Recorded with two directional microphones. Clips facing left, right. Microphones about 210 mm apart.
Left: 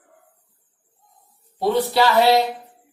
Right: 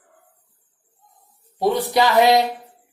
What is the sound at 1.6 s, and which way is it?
Speech, 15° right (ahead or behind).